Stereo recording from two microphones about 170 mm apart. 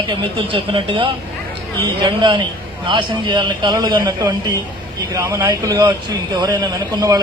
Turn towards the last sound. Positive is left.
turn(degrees=-20)  # may be behind; listen again after turning